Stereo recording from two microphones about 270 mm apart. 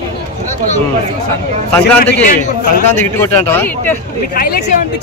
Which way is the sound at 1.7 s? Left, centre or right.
Centre.